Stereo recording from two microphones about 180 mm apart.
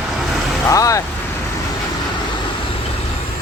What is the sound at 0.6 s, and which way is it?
Vehicle, 20° left (ahead or behind).